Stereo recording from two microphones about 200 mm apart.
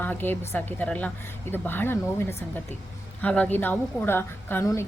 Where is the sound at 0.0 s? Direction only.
10° left (ahead or behind).